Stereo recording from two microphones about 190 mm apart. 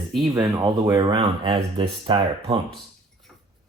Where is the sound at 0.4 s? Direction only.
20° right (ahead or behind).